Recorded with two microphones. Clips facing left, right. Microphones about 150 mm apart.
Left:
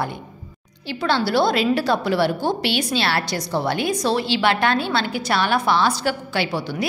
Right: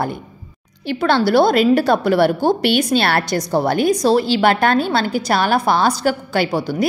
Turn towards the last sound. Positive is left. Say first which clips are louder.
# right 5 dB
turn(degrees=-45)  # may be behind; listen again after turning